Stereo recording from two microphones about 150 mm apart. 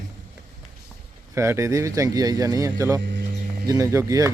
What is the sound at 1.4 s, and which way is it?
Speech, 20° right (ahead or behind).